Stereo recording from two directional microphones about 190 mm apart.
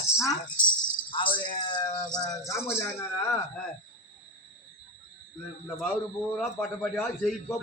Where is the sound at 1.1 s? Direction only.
25° left (ahead or behind).